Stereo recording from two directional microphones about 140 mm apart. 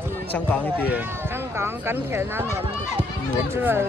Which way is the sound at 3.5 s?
15° right (ahead or behind).